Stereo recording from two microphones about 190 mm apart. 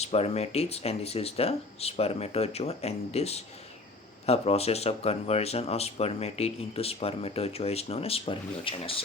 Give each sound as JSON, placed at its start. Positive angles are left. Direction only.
{"t": 0.0, "sound": "speech", "side_deg": 35}